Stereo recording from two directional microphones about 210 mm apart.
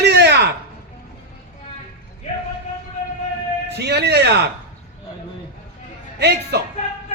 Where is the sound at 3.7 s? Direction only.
50° right (ahead or behind).